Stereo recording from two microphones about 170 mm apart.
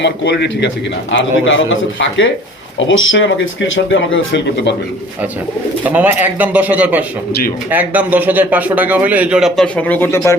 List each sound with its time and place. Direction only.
0.0 s a man's voice: 85° left
5.8 s a man's voice: 10° right (ahead or behind); by 10.3 s 15° left (ahead or behind)